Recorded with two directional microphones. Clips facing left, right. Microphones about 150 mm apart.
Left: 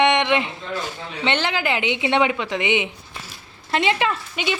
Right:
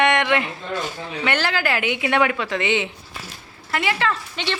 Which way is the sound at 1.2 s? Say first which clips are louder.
Even; 20° left (ahead or behind).